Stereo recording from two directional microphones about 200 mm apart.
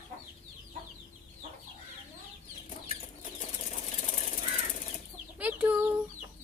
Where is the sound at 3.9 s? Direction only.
35° left (ahead or behind).